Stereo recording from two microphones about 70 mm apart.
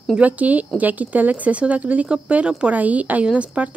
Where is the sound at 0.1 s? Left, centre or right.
Right.